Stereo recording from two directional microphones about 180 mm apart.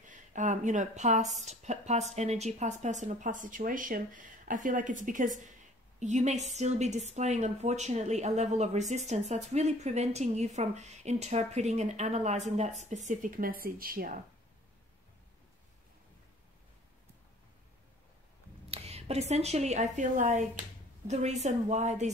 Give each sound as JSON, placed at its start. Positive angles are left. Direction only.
{"t": 0.3, "sound": "speech", "side_deg": -45}
{"t": 18.7, "sound": "a woman's voice", "side_deg": -35}